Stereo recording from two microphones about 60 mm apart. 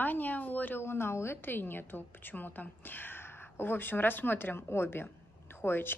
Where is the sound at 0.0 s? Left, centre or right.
Left.